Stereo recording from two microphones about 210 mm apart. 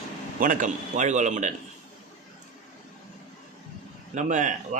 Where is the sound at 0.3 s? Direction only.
40° right (ahead or behind).